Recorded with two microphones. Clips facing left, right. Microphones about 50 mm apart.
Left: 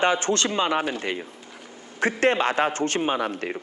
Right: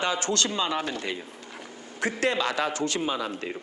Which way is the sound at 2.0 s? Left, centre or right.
Left.